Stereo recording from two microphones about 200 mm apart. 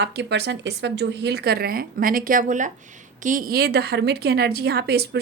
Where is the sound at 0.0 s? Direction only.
55° right (ahead or behind).